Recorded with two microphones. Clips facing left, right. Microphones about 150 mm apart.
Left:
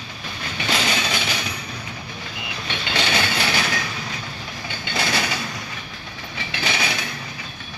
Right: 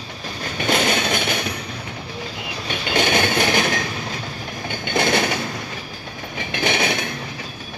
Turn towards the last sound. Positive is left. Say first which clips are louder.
# right 5 dB
turn(degrees=-55)  # may be behind; listen again after turning